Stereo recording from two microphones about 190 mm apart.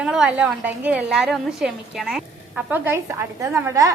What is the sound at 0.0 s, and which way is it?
A woman's voice, 5° right (ahead or behind).